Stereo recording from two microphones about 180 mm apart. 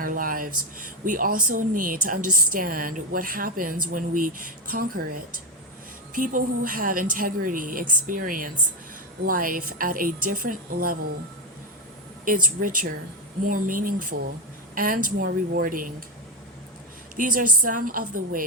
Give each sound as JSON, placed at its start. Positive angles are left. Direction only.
{"t": 0.0, "sound": "speech", "side_deg": -50}
{"t": 12.2, "sound": "speech", "side_deg": -50}
{"t": 17.2, "sound": "speech", "side_deg": -50}